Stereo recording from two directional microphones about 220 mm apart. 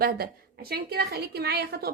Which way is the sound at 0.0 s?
45° right (ahead or behind).